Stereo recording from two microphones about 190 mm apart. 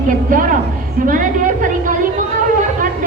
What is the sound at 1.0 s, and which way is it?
Speech, 45° right (ahead or behind).